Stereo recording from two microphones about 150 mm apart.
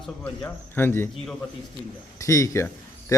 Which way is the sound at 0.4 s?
15° left (ahead or behind).